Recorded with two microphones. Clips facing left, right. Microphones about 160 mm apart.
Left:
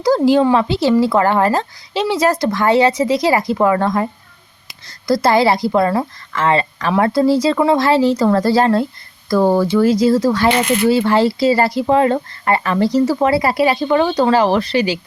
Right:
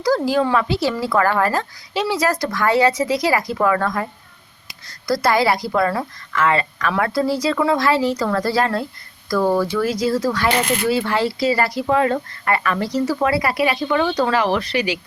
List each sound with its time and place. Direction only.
0.0 s speech: 25° left (ahead or behind)